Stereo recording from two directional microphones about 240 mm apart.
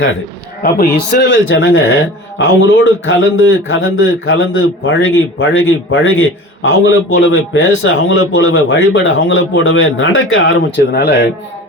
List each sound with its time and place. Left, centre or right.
0.6 s a man's voice: left